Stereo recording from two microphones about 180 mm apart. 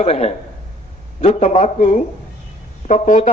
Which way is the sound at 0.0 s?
35° left (ahead or behind).